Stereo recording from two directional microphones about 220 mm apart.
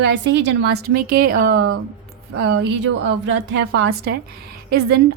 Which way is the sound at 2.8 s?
55° right (ahead or behind).